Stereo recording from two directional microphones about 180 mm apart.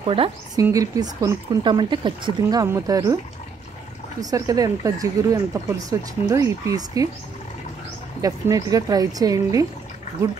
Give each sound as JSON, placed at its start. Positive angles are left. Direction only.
{"t": 0.0, "sound": "speech", "side_deg": -30}
{"t": 0.6, "sound": "speech", "side_deg": -20}
{"t": 4.2, "sound": "speech", "side_deg": -20}
{"t": 8.2, "sound": "speech", "side_deg": -20}